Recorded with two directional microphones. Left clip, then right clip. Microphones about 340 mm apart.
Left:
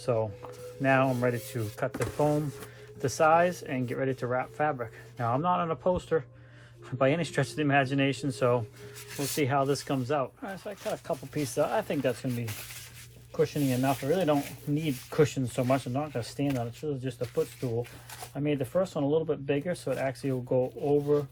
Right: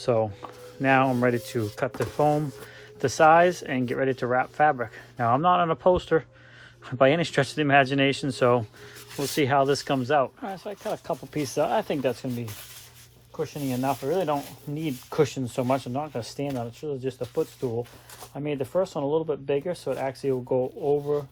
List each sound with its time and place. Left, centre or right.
0.0 s speech: right
13.7 s speech: centre